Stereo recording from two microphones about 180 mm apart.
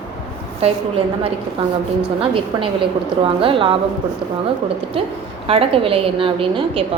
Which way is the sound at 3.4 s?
30° right (ahead or behind).